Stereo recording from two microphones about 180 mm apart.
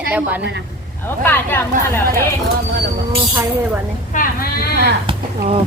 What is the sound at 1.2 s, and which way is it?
Speech, 10° left (ahead or behind).